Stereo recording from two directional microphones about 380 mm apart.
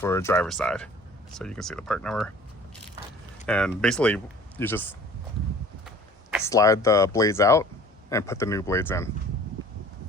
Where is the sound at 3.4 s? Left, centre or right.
Centre.